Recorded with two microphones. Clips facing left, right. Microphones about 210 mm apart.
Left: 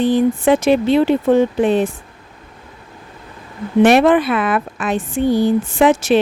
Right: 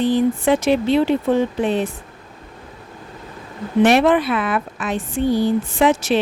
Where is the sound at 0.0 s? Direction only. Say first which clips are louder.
Left 3 dB; 50° left (ahead or behind).